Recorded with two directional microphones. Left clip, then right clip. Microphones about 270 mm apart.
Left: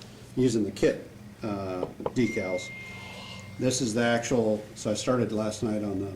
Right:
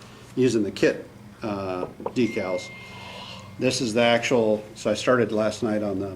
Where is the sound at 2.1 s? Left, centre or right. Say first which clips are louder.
Right 4 dB; centre.